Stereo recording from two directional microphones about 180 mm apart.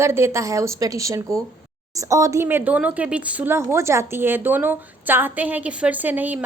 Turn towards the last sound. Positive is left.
turn(degrees=-10)  # may be behind; listen again after turning